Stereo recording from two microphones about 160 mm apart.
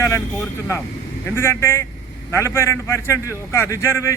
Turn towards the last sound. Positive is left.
turn(degrees=15)  # may be behind; listen again after turning